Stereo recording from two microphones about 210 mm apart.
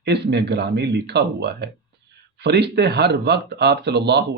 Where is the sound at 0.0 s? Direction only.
55° right (ahead or behind).